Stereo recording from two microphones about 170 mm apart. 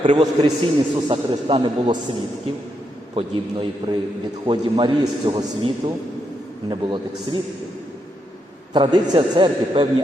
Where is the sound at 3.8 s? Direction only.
20° right (ahead or behind).